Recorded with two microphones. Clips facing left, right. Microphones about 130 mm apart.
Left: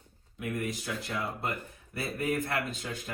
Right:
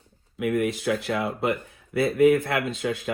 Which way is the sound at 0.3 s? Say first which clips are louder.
Right 10 dB; 90° right.